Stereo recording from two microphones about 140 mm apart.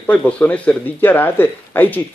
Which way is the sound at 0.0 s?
10° left (ahead or behind).